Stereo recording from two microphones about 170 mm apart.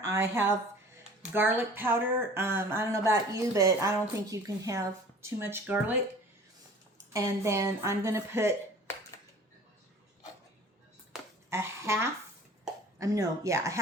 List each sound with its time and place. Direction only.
0.0 s speech: 20° right (ahead or behind)
7.1 s speech: 20° right (ahead or behind)
11.4 s a sound: 15° right (ahead or behind)
13.0 s speech: 20° right (ahead or behind)